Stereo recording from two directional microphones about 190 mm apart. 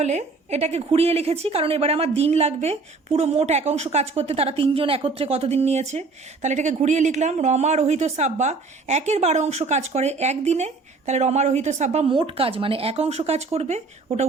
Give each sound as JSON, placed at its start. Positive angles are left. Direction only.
{"t": 0.0, "sound": "a woman's voice", "side_deg": -35}